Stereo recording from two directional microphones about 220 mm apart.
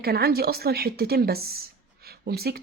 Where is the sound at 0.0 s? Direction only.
45° right (ahead or behind).